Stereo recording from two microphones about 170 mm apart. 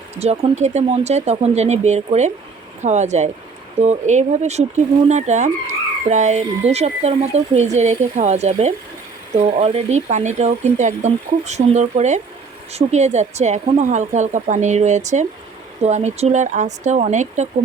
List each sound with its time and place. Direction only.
0.2 s speech: 40° right (ahead or behind)